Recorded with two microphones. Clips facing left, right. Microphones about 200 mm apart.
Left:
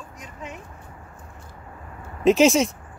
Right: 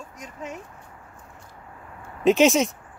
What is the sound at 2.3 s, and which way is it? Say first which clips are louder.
Speech: left 1 dB; centre (ahead or behind).